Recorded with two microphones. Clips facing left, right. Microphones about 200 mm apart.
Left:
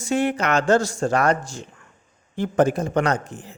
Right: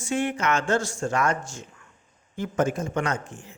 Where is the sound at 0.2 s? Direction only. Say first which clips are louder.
Left 3 dB; 35° left (ahead or behind).